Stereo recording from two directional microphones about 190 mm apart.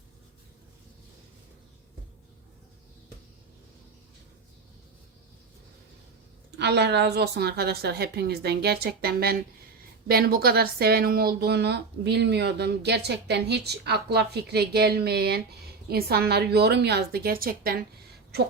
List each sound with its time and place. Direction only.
6.6 s speech: 60° right (ahead or behind)